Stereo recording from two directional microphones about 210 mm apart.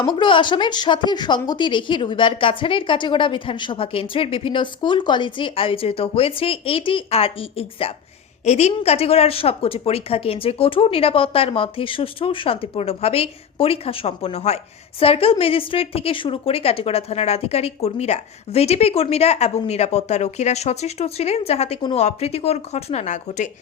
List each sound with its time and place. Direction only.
0.2 s a woman's voice: 20° left (ahead or behind)